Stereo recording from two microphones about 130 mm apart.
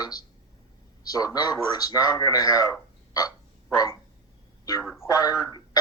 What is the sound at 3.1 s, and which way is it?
Frog, 30° left (ahead or behind).